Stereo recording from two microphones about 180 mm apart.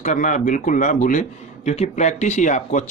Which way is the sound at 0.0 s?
45° left (ahead or behind).